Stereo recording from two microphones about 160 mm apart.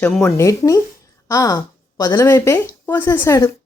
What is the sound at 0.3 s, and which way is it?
A woman's voice, 20° left (ahead or behind).